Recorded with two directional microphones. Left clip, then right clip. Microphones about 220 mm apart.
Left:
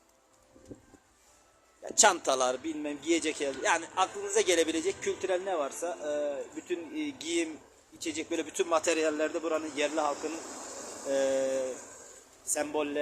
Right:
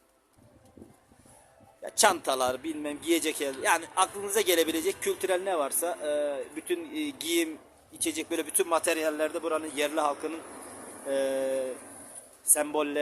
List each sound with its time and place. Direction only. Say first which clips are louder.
1.8 s speech: even; 15° right (ahead or behind)